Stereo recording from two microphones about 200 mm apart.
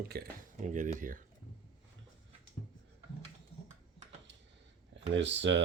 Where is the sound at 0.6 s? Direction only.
40° right (ahead or behind).